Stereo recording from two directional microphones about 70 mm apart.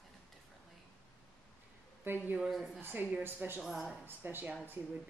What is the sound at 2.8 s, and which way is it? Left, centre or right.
Speech, right.